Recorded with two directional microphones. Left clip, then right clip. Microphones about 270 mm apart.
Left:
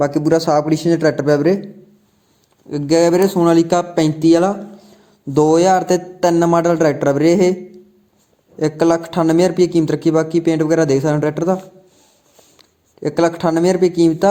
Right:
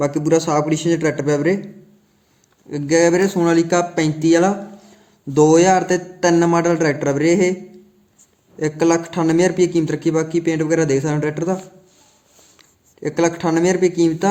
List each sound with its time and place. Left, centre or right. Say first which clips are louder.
0.0 s speech: left 2 dB; centre
2.6 s speech: left 1 dB; centre
8.5 s a man's voice: left 2 dB; centre